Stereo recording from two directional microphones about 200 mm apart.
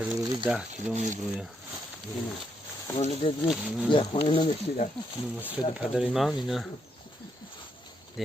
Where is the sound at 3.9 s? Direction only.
25° left (ahead or behind).